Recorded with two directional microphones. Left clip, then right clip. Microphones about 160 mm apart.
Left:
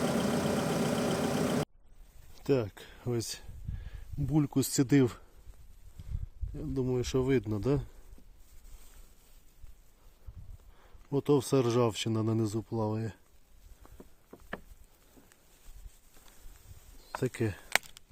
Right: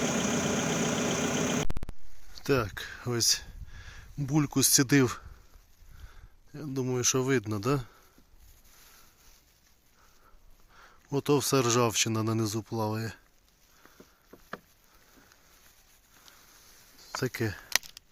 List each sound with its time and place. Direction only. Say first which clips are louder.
0.0 s vehicle: right 1 dB; 20° left (ahead or behind)
2.4 s speech: right 2 dB; centre (ahead or behind)
6.5 s speech: even; centre (ahead or behind)
10.8 s speech: right 1 dB; centre (ahead or behind)
17.2 s speech: even; centre (ahead or behind)